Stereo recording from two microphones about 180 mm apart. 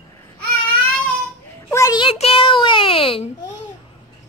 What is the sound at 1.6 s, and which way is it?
A child's voice, 15° left (ahead or behind).